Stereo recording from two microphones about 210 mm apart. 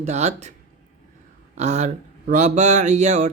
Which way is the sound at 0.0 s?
35° right (ahead or behind).